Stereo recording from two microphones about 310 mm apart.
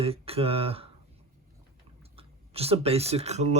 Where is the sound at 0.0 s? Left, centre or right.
Centre.